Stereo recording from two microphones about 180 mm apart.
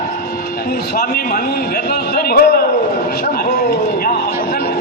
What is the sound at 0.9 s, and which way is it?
A man's voice, 55° left (ahead or behind).